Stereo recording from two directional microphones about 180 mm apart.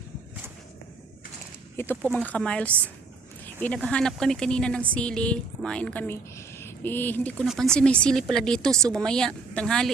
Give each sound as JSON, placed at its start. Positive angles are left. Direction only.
{"t": 1.7, "sound": "speech", "side_deg": 10}
{"t": 2.0, "sound": "speech", "side_deg": -5}